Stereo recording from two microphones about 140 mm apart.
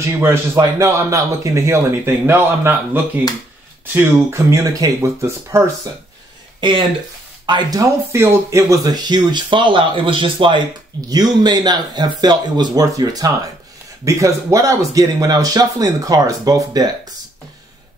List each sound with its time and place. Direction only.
0.0 s speech: 20° right (ahead or behind)
7.4 s speech: 30° right (ahead or behind)